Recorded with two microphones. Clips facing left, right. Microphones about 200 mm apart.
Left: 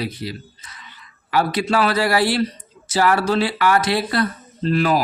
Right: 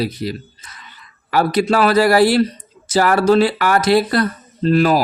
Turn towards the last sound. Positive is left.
turn(degrees=-40)  # may be behind; listen again after turning